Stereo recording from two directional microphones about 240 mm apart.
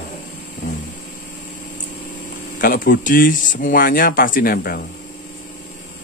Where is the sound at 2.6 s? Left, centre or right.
Left.